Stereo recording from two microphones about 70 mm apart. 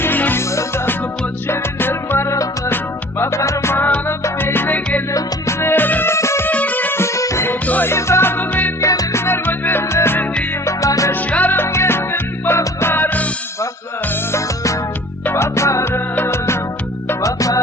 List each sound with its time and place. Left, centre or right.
0.0 s music: left
1.5 s music: left
2.6 s music: left
3.8 s music: left
5.1 s music: left
6.1 s music: left
6.5 s music: left
7.0 s music: left
8.8 s music: left
9.1 s music: left
10.7 s music: left
11.1 s music: left
14.3 s music: left
17.2 s music: left